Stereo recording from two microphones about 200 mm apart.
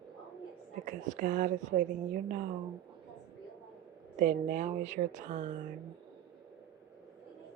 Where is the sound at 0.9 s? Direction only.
40° right (ahead or behind).